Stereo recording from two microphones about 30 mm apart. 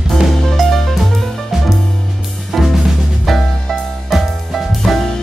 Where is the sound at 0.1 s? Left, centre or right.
Centre.